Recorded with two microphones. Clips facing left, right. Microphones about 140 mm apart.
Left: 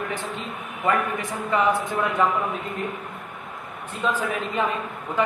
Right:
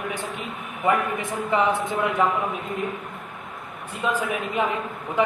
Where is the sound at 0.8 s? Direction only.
20° right (ahead or behind).